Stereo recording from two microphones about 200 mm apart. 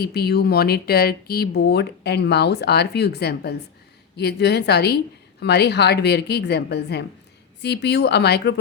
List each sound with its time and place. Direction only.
0.0 s a woman's voice: 50° left (ahead or behind)